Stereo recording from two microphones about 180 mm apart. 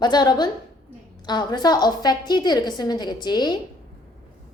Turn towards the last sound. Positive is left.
turn(degrees=25)  # may be behind; listen again after turning